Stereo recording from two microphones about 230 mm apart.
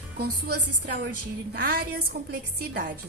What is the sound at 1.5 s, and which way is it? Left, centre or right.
A woman's voice, right.